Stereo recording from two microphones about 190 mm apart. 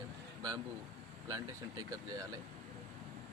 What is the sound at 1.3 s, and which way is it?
Speech, 15° right (ahead or behind).